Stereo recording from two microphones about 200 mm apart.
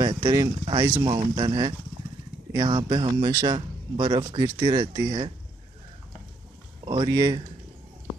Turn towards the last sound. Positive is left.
turn(degrees=-20)  # may be behind; listen again after turning